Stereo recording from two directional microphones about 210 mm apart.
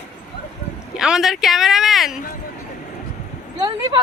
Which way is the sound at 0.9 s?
5° right (ahead or behind).